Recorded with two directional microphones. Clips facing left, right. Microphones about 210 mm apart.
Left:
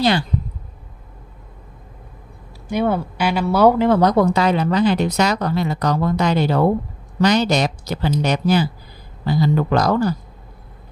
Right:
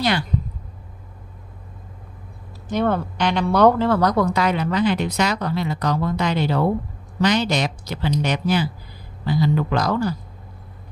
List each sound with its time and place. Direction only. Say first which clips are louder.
2.7 s a woman's voice: left 1 dB; 10° left (ahead or behind); by 10.1 s 40° left (ahead or behind)